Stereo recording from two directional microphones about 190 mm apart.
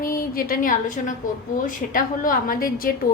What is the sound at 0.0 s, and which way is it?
A woman's voice, 50° left (ahead or behind).